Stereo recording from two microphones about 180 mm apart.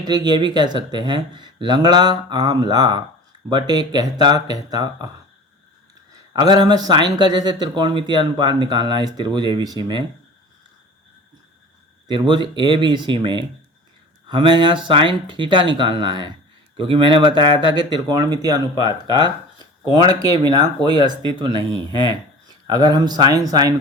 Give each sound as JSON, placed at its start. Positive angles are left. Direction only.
{"t": 0.0, "sound": "speech", "side_deg": -25}
{"t": 6.3, "sound": "speech", "side_deg": -25}
{"t": 12.0, "sound": "speech", "side_deg": -25}